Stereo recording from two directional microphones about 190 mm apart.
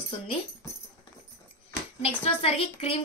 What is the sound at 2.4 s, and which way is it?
Speech, 30° left (ahead or behind).